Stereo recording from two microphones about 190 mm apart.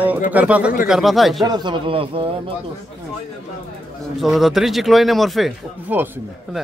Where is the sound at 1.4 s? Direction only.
20° right (ahead or behind).